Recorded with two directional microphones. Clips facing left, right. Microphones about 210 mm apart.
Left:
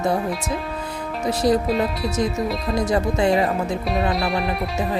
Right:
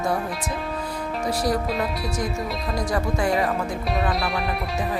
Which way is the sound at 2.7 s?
25° left (ahead or behind).